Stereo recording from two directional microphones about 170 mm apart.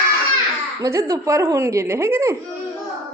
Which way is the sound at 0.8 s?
15° right (ahead or behind).